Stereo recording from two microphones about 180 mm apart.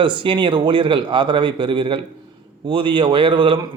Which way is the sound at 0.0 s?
25° right (ahead or behind).